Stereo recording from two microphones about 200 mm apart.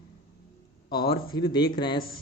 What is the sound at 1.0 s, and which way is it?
Speech, 25° left (ahead or behind).